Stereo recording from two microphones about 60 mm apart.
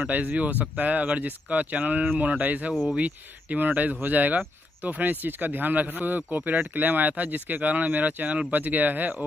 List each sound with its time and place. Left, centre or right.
0.0 s speech: right